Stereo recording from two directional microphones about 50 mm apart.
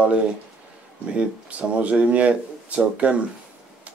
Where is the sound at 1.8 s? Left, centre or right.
Right.